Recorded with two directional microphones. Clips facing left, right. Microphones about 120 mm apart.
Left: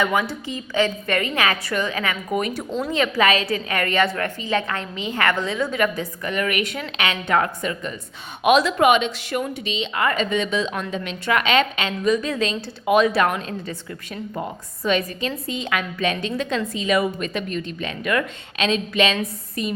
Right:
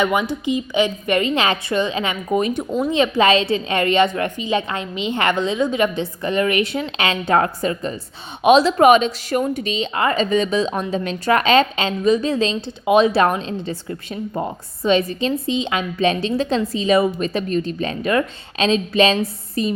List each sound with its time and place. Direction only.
0.0 s a woman's voice: 20° right (ahead or behind)
8.8 s a woman's voice: 40° right (ahead or behind)